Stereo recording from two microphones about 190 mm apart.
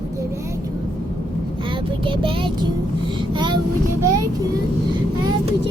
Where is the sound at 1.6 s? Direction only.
25° right (ahead or behind).